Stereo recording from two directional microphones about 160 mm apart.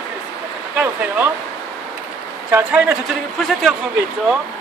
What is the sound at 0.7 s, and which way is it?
Speech, 10° right (ahead or behind).